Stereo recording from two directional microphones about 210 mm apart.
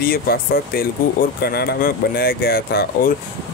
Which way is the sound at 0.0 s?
45° left (ahead or behind).